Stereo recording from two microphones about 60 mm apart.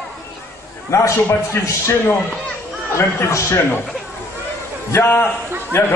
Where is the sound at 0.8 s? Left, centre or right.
Left.